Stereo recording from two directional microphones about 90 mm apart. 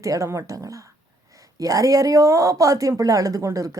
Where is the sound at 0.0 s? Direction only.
35° right (ahead or behind).